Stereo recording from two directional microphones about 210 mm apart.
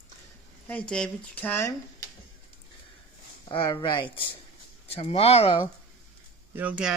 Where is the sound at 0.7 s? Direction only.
5° left (ahead or behind).